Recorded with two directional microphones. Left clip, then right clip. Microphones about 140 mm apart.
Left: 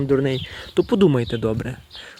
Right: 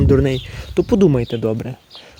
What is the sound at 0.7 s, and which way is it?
Speech, centre (ahead or behind).